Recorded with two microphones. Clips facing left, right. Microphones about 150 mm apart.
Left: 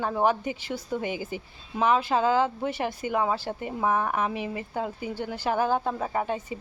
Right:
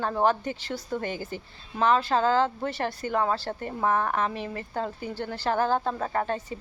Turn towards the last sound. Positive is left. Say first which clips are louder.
# even
turn(degrees=10)  # may be behind; listen again after turning